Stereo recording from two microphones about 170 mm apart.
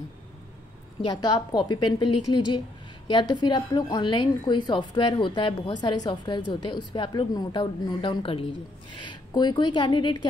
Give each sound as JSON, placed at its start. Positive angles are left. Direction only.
{"t": 1.0, "sound": "a woman's voice", "side_deg": 25}